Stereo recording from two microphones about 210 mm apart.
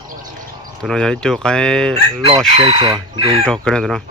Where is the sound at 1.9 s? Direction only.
25° right (ahead or behind).